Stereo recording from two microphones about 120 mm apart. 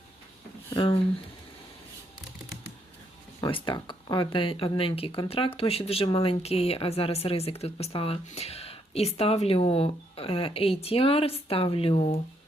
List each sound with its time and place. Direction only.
0.8 s speech: 45° left (ahead or behind)
3.4 s speech: 45° left (ahead or behind)